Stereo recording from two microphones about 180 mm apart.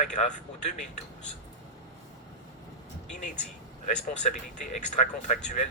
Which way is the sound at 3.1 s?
45° left (ahead or behind).